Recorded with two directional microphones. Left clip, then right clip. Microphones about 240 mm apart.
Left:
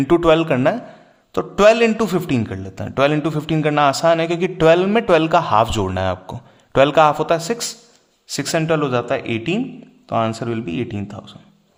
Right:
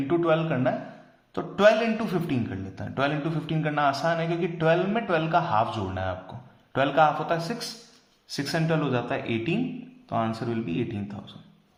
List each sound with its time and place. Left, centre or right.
0.1 s a man's voice: left